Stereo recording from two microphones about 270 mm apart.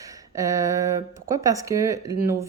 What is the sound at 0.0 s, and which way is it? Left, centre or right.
Speech, centre.